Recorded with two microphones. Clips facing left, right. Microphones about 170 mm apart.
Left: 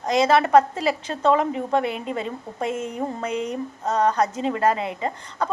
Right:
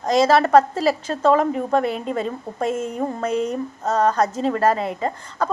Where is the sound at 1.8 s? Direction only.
20° left (ahead or behind).